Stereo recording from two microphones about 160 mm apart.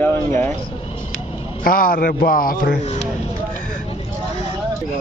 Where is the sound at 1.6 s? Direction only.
65° left (ahead or behind).